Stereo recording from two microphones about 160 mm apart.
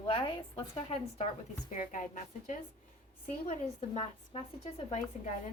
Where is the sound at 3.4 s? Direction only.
40° left (ahead or behind).